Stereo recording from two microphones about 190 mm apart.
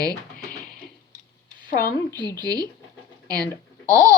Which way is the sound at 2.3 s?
20° right (ahead or behind).